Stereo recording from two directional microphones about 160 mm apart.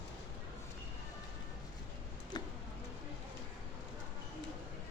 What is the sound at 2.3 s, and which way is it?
Bird, 25° left (ahead or behind).